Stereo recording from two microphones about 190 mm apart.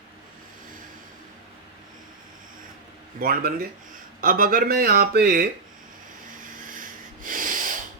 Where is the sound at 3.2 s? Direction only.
50° right (ahead or behind).